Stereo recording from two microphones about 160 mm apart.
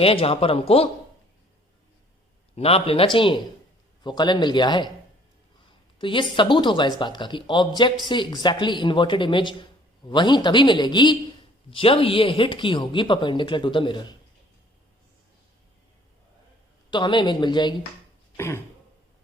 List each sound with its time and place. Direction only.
0.0 s speech: 35° left (ahead or behind)
2.6 s speech: 40° left (ahead or behind)
6.0 s speech: 30° left (ahead or behind)
16.9 s speech: 30° left (ahead or behind)
18.3 s throat clearing: 15° left (ahead or behind)